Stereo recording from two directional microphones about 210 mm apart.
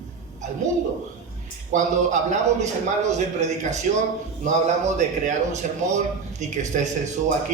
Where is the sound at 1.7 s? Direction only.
35° right (ahead or behind).